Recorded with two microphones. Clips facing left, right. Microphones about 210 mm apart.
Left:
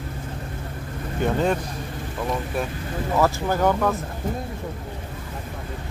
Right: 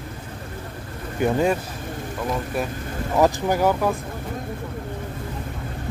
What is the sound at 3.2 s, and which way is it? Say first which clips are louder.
Speech: right 3 dB; 10° right (ahead or behind).